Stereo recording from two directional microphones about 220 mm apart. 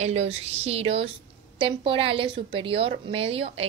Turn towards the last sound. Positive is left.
turn(degrees=-25)  # may be behind; listen again after turning